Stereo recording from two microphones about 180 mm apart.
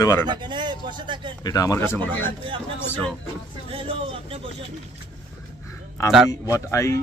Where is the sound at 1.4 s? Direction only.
20° left (ahead or behind).